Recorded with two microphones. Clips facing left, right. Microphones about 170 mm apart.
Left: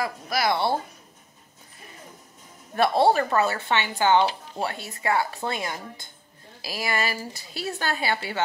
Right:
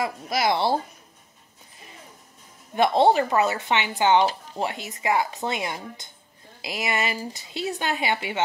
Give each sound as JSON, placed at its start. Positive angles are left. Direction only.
{"t": 0.0, "sound": "speech", "side_deg": -25}
{"t": 2.7, "sound": "speech", "side_deg": -20}